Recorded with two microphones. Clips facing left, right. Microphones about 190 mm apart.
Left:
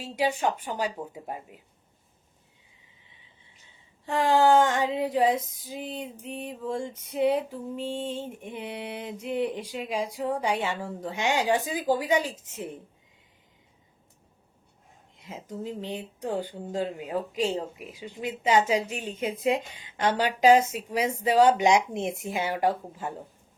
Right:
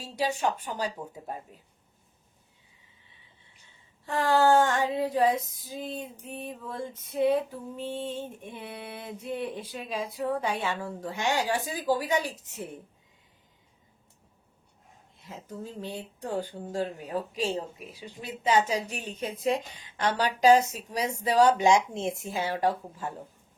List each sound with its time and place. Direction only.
0.0 s speech: 10° left (ahead or behind)
3.4 s child singing: 15° left (ahead or behind)
5.5 s speech: 15° left (ahead or behind)
15.1 s a woman's voice: 15° left (ahead or behind)